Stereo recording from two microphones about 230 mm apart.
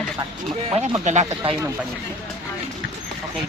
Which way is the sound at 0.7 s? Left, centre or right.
Right.